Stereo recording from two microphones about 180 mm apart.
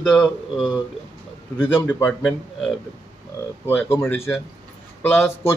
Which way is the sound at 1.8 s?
10° left (ahead or behind).